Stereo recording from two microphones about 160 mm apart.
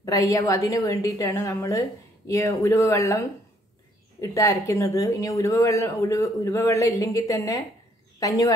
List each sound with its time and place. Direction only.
0.0 s speech: 20° left (ahead or behind)